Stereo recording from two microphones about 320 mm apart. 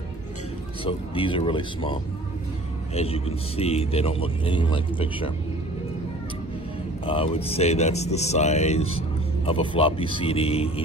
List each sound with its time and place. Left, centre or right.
0.8 s speech: centre
7.1 s speech: centre